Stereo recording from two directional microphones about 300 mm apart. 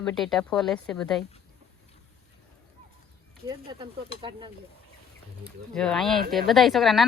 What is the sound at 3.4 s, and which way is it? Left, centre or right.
Speech, centre.